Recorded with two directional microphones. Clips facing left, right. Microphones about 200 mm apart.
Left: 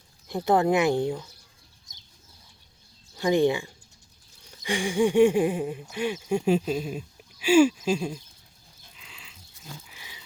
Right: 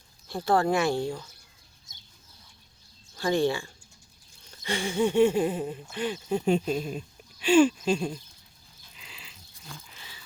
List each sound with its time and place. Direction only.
0.3 s speech: 20° left (ahead or behind)
3.2 s speech: 15° left (ahead or behind)
9.0 s dog: centre (ahead or behind); by 10.2 s 15° left (ahead or behind)